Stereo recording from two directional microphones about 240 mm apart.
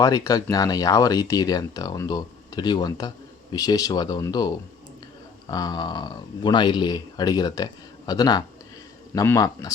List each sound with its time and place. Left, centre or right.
0.0 s speech: centre